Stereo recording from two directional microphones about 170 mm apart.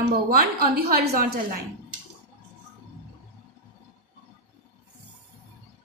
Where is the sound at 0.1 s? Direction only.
60° right (ahead or behind).